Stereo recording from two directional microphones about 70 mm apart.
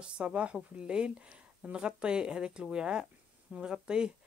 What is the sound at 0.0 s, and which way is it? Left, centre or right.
Speech, centre.